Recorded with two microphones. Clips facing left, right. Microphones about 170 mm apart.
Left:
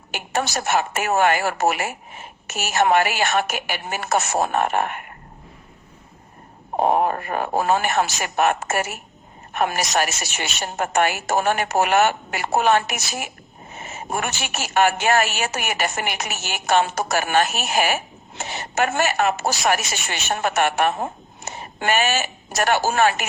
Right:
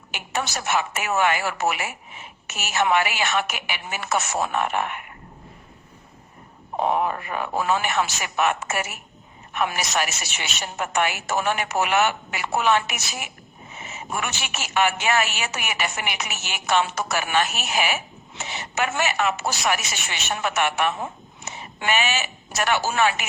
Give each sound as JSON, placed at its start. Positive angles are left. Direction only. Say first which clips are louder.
{"t": 0.1, "sound": "a woman's voice", "louder": "left 4 dB", "side_deg": 45}
{"t": 6.7, "sound": "a woman's voice", "louder": "left 4 dB", "side_deg": 45}